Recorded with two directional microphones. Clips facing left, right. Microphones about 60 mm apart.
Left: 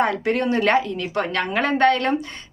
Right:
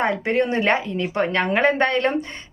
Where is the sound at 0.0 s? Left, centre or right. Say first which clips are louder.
Even; right.